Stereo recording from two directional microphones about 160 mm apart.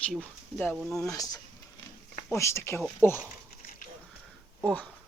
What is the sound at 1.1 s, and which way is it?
Speech, 20° left (ahead or behind).